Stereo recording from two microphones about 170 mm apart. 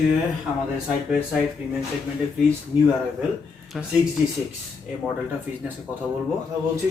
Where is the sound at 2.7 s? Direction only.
10° right (ahead or behind).